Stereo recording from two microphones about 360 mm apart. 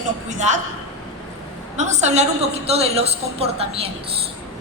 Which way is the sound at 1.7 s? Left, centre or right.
Centre.